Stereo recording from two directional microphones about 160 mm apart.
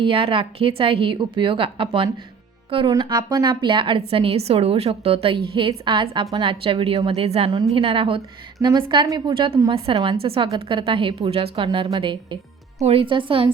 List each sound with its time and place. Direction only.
0.0 s a woman's voice: 35° right (ahead or behind)